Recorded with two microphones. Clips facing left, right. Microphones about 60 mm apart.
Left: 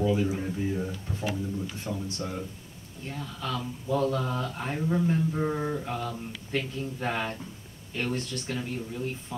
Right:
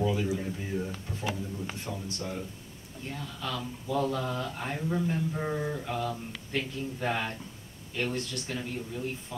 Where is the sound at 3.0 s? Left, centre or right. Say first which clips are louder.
Left 2 dB; centre.